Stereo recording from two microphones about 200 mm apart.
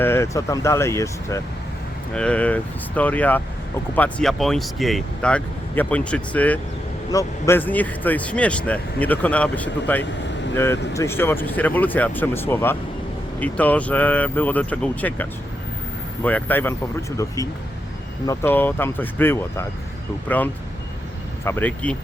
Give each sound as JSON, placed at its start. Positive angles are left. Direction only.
{"t": 0.0, "sound": "speech", "side_deg": 10}